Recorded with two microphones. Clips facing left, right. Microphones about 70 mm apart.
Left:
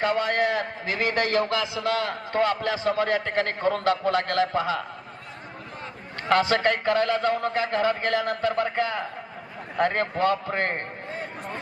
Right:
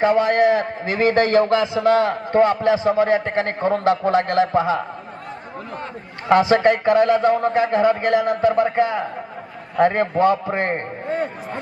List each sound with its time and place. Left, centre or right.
0.0 s a man's voice: centre
0.9 s a man's voice: right
6.2 s a man's voice: right
11.1 s chatter: right